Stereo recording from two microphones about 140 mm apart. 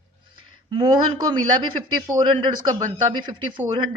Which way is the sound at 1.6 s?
30° right (ahead or behind).